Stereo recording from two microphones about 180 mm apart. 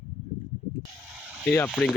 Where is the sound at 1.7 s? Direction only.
Centre (ahead or behind).